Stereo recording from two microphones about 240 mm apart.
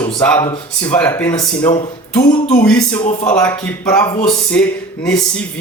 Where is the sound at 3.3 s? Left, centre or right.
Centre.